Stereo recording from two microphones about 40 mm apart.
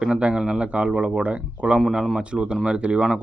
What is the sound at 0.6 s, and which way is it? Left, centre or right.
Speech, right.